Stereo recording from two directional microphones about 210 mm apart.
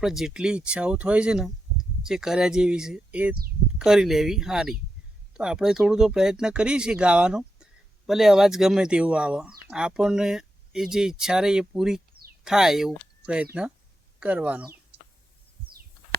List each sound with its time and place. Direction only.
0.0 s speech: centre (ahead or behind)